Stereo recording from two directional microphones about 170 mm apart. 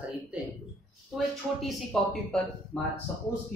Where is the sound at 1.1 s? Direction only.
Centre (ahead or behind).